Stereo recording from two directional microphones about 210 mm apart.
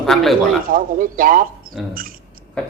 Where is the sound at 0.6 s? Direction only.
40° right (ahead or behind).